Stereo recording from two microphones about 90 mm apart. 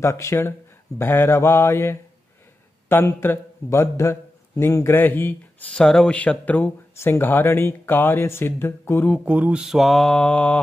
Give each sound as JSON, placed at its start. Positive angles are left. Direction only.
{"t": 0.0, "sound": "a man's voice", "side_deg": 30}
{"t": 5.7, "sound": "speech", "side_deg": 10}
{"t": 9.2, "sound": "mantra", "side_deg": -15}